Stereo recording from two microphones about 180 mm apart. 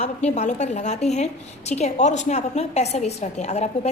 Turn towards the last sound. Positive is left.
turn(degrees=40)  # may be behind; listen again after turning